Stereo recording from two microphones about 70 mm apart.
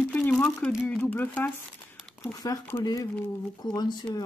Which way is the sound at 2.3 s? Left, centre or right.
Left.